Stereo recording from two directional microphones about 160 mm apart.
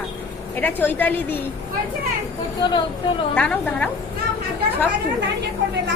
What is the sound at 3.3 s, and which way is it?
Speech, 10° left (ahead or behind).